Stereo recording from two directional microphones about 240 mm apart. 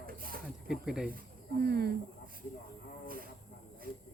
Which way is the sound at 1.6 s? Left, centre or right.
Right.